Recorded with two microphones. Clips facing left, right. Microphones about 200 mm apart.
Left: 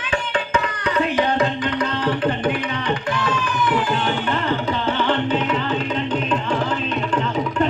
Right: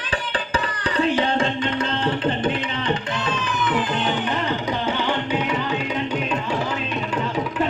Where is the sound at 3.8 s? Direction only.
20° right (ahead or behind).